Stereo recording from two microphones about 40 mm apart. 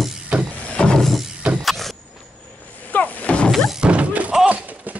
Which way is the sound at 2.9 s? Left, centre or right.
Left.